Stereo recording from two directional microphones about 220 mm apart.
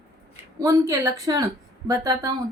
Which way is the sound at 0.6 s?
15° right (ahead or behind).